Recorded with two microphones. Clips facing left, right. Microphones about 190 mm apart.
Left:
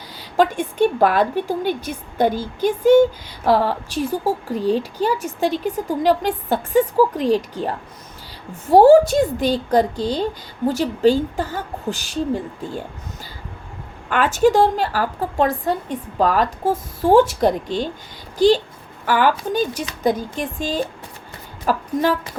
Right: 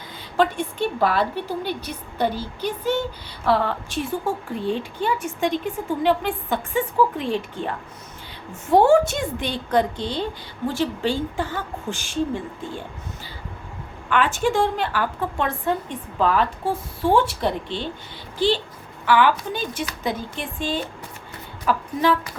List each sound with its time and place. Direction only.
0.3 s a woman's voice: 45° left (ahead or behind)
14.1 s a woman's voice: 40° left (ahead or behind)